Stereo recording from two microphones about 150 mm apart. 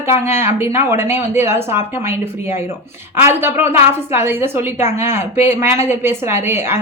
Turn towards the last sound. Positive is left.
turn(degrees=-15)  # may be behind; listen again after turning